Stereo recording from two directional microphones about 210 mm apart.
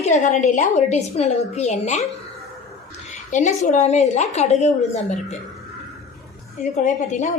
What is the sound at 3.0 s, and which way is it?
A woman's voice, 35° left (ahead or behind).